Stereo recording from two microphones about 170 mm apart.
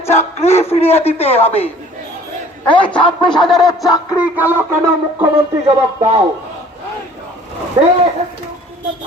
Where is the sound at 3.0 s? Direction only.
25° left (ahead or behind).